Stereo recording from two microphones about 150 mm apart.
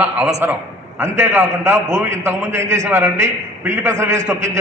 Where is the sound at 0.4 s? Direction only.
15° right (ahead or behind).